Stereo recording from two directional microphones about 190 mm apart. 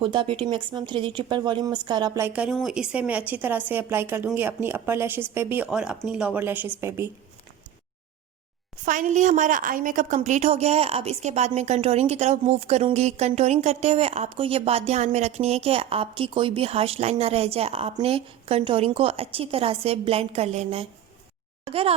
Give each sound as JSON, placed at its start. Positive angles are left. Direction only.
{"t": 0.0, "sound": "speech", "side_deg": -25}
{"t": 8.8, "sound": "a woman's voice", "side_deg": -40}
{"t": 21.6, "sound": "a sound", "side_deg": -30}